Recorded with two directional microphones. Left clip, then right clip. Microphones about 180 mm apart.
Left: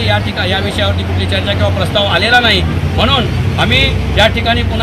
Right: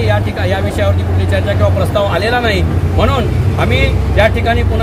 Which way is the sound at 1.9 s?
30° right (ahead or behind).